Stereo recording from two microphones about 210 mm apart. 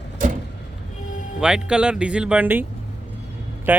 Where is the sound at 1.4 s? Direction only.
5° right (ahead or behind).